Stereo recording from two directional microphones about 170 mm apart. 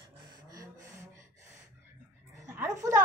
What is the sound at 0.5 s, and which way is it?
Gasp, 20° right (ahead or behind).